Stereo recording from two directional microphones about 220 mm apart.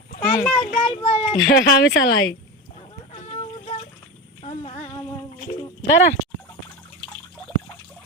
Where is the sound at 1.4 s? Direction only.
50° left (ahead or behind).